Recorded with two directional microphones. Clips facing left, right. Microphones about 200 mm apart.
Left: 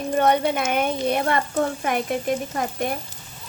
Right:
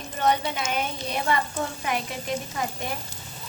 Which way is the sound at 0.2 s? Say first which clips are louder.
Left 4 dB; 55° left (ahead or behind).